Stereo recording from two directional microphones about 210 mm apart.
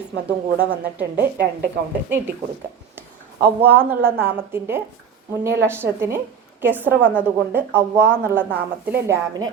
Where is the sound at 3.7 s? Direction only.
10° right (ahead or behind).